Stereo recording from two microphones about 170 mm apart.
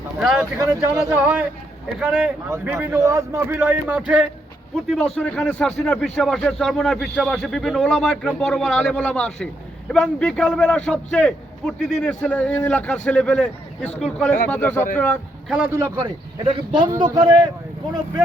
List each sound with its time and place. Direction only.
0.2 s a man's voice: 5° right (ahead or behind)
4.9 s a man's voice: 5° left (ahead or behind)
15.7 s speech: 20° right (ahead or behind)